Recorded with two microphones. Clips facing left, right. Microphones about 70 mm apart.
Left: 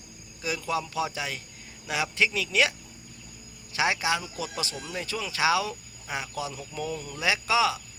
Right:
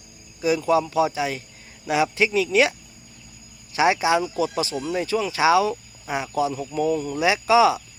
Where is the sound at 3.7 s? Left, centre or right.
Centre.